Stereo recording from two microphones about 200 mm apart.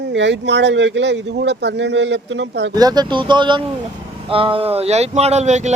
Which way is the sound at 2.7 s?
20° right (ahead or behind).